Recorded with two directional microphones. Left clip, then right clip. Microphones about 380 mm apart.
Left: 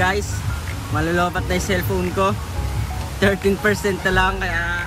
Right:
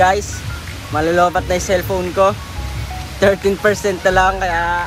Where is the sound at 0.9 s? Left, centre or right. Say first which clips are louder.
Right 7 dB; centre.